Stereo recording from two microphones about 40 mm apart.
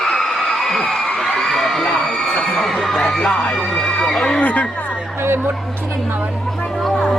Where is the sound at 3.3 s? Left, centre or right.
Left.